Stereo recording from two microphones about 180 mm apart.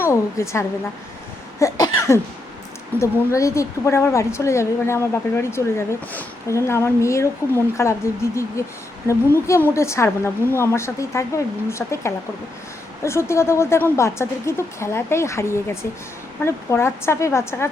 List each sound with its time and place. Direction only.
0.0 s a woman's voice: 15° left (ahead or behind)
1.5 s cough: 15° left (ahead or behind)
3.0 s a woman's voice: 15° left (ahead or behind)